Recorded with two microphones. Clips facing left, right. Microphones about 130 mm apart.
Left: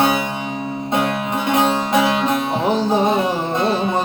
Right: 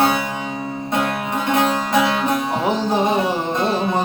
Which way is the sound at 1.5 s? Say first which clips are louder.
Left 1 dB; 20° left (ahead or behind).